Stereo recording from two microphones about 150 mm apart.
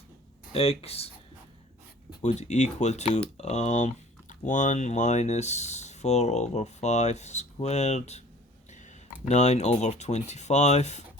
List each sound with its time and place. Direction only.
0.5 s speech: 40° left (ahead or behind)
2.2 s speech: 50° left (ahead or behind)
9.3 s speech: 50° left (ahead or behind)